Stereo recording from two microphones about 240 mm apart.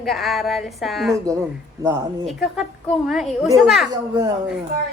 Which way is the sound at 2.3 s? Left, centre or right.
Centre.